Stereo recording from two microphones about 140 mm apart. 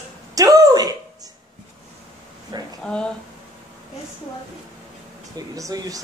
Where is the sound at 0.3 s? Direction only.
25° right (ahead or behind).